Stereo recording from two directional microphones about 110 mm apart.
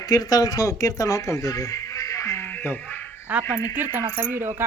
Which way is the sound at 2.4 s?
15° left (ahead or behind).